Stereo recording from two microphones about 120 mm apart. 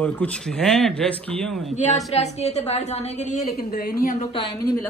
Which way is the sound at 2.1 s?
65° left (ahead or behind).